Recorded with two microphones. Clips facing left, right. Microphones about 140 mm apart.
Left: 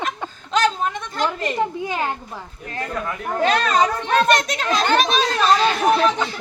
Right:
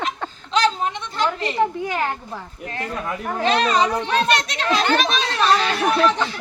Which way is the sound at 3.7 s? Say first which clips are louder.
Left 1 dB; 50° left (ahead or behind).